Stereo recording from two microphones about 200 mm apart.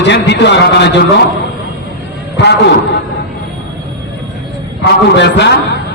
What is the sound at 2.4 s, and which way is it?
Speech, 60° left (ahead or behind).